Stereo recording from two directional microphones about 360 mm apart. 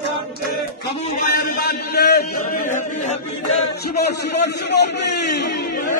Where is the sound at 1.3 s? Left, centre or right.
Left.